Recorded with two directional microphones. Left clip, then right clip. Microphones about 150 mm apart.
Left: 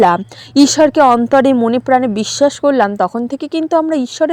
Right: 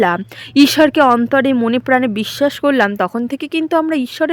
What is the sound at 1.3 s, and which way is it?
A woman's voice, centre (ahead or behind).